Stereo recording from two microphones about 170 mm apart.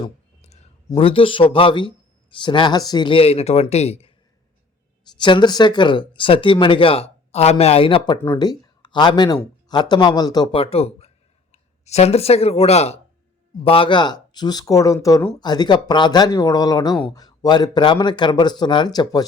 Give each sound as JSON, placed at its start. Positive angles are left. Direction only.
{"t": 0.0, "sound": "clicking", "side_deg": 40}
{"t": 0.9, "sound": "speech", "side_deg": 30}
{"t": 5.1, "sound": "speech", "side_deg": 25}
{"t": 8.2, "sound": "speech", "side_deg": 20}